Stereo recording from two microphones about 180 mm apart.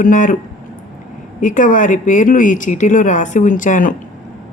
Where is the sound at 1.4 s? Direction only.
45° left (ahead or behind).